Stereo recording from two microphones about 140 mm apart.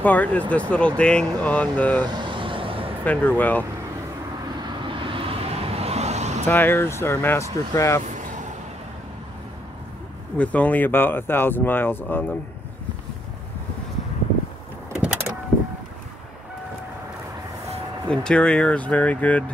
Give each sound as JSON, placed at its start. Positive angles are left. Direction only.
{"t": 0.0, "sound": "speech", "side_deg": 10}
{"t": 2.1, "sound": "vehicle", "side_deg": -35}
{"t": 3.1, "sound": "speech", "side_deg": 10}
{"t": 4.6, "sound": "vehicle", "side_deg": -35}
{"t": 6.4, "sound": "speech", "side_deg": 15}
{"t": 8.0, "sound": "a sound", "side_deg": -60}
{"t": 10.3, "sound": "speech", "side_deg": 10}
{"t": 18.0, "sound": "speech", "side_deg": 5}